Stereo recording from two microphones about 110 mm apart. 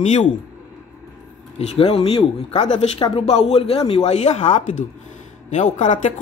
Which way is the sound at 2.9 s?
50° left (ahead or behind).